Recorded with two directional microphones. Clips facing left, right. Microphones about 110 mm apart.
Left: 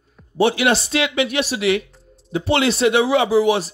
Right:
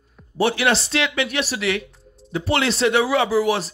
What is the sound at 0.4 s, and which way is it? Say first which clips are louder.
Speech: left 3 dB; 20° left (ahead or behind).